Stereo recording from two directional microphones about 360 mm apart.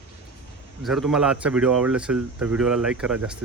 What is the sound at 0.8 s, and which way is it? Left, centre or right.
Speech, centre.